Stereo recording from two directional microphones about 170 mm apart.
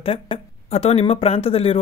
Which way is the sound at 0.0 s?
35° left (ahead or behind).